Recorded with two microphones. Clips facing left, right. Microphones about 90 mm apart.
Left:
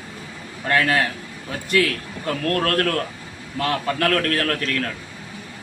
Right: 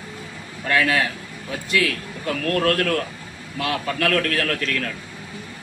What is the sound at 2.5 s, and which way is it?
A man's voice, 40° left (ahead or behind).